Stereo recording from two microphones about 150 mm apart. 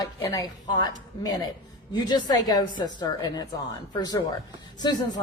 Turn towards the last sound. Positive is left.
turn(degrees=30)  # may be behind; listen again after turning